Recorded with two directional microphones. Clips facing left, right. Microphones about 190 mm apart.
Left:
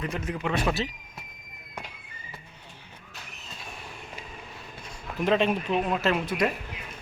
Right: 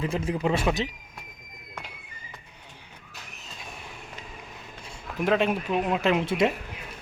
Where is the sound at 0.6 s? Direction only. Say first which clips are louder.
Right 1 dB; 15° right (ahead or behind).